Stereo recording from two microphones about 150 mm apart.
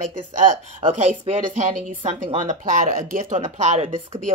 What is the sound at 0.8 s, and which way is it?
Speech, 45° right (ahead or behind).